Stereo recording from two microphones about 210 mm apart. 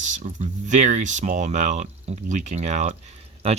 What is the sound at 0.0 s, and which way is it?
Speech, 35° right (ahead or behind).